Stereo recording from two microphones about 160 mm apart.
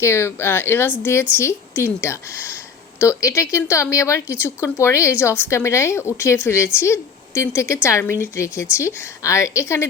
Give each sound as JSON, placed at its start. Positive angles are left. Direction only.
{"t": 0.0, "sound": "a woman's voice", "side_deg": 15}